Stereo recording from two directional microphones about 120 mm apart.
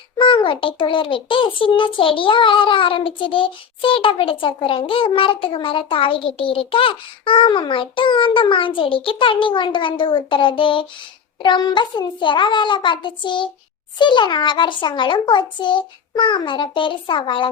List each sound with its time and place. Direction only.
0.2 s a child's voice: 45° left (ahead or behind)